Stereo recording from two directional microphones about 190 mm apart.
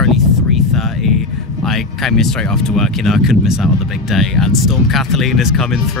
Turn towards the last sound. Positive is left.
turn(degrees=0)  # may be behind; listen again after turning